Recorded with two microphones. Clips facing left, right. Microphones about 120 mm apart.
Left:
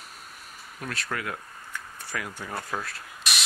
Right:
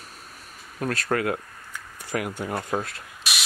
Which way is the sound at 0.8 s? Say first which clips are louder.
Right 8 dB; 45° right (ahead or behind).